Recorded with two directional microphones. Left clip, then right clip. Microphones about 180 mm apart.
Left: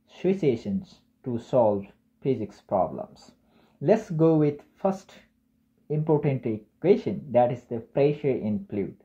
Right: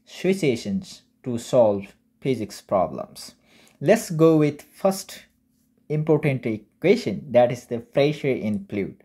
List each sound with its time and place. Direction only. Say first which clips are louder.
0.0 s speech: right 2 dB; 25° right (ahead or behind)